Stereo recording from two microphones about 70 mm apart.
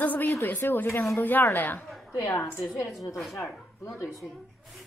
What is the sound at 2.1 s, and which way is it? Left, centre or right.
Speech, left.